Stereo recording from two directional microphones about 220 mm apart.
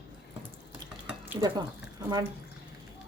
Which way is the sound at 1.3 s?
20° right (ahead or behind).